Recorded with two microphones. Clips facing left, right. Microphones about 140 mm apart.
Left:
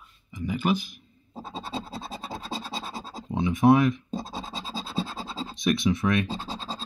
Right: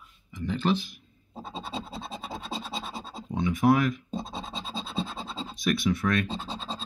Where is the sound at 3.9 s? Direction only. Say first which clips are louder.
Left 2 dB; centre (ahead or behind).